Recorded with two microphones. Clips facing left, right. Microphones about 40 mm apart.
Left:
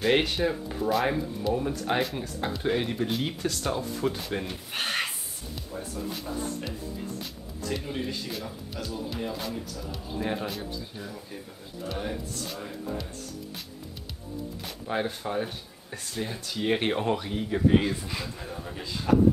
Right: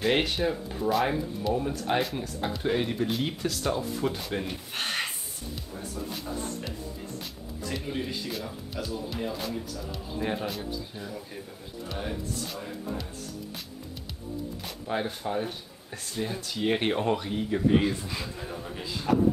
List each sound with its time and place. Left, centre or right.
0.0 s speech: centre
14.9 s speech: centre
19.1 s speech: centre